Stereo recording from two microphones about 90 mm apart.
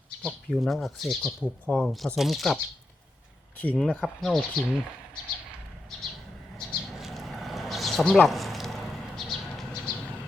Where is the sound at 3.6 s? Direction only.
15° left (ahead or behind).